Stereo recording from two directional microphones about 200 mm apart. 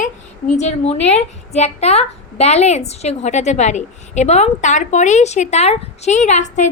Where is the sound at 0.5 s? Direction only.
35° left (ahead or behind).